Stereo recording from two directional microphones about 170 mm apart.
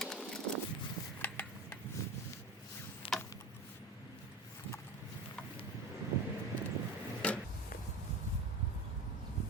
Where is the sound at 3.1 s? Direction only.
30° left (ahead or behind).